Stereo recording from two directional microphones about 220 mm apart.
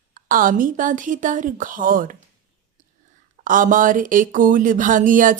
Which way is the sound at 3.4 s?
35° right (ahead or behind).